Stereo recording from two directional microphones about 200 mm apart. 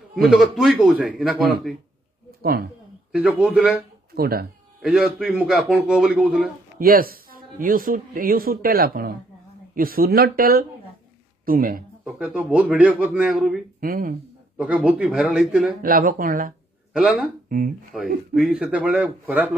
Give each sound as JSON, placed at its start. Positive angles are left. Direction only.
{"t": 0.1, "sound": "a man's voice", "side_deg": 0}
{"t": 2.4, "sound": "speech", "side_deg": -50}
{"t": 3.1, "sound": "a man's voice", "side_deg": -5}
{"t": 4.1, "sound": "speech", "side_deg": -50}
{"t": 5.2, "sound": "a man's voice", "side_deg": -5}
{"t": 6.8, "sound": "speech", "side_deg": -50}
{"t": 12.0, "sound": "a man's voice", "side_deg": -5}
{"t": 13.7, "sound": "speech", "side_deg": -45}
{"t": 14.6, "sound": "a man's voice", "side_deg": -5}
{"t": 15.8, "sound": "speech", "side_deg": -45}
{"t": 17.9, "sound": "speech", "side_deg": 0}